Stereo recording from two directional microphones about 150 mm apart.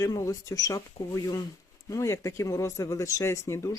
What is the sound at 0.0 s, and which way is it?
Speech, 25° left (ahead or behind).